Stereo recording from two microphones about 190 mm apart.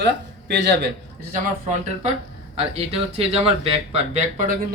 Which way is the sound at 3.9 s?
45° right (ahead or behind).